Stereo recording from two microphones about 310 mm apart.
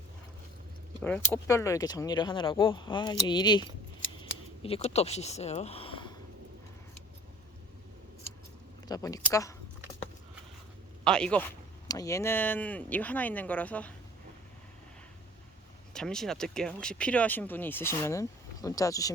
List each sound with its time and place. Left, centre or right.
1.0 s speech: centre
4.2 s a sound: centre
8.9 s speech: centre
11.0 s speech: centre
15.9 s speech: centre